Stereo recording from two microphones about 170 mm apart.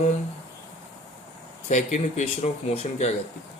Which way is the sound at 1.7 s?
45° left (ahead or behind).